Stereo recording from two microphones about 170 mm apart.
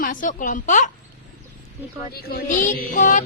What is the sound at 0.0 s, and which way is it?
Speech, 50° left (ahead or behind).